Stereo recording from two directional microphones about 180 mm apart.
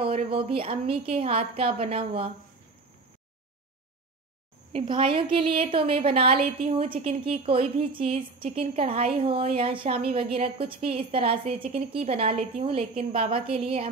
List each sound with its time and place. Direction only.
0.0 s a woman's voice: 30° right (ahead or behind)
4.7 s a woman's voice: 30° right (ahead or behind)